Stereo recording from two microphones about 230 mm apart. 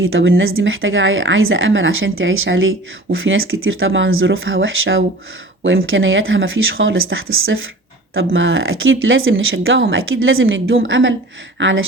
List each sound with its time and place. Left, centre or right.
0.0 s a woman's voice: right